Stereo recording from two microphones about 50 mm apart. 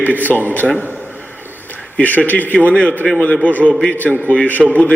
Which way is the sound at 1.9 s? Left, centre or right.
Left.